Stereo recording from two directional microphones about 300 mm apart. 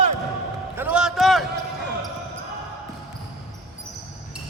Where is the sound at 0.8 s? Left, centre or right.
Centre.